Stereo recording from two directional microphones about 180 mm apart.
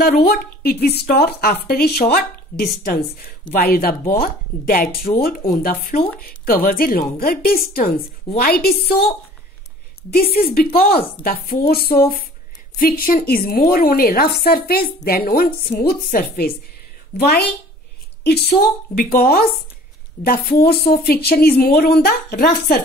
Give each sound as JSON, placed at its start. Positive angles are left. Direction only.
{"t": 0.0, "sound": "a woman's voice", "side_deg": 55}
{"t": 10.1, "sound": "a woman's voice", "side_deg": 55}